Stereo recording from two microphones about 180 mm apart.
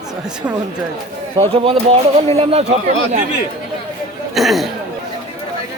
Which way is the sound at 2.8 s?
45° right (ahead or behind).